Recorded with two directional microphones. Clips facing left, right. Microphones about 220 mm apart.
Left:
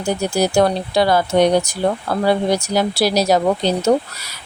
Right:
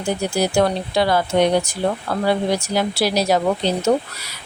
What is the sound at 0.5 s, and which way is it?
Speech, 40° left (ahead or behind).